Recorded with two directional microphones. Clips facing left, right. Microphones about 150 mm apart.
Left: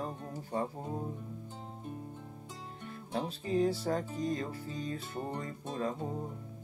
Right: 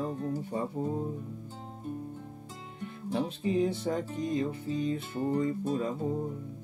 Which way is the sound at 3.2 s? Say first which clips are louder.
Even; 20° right (ahead or behind).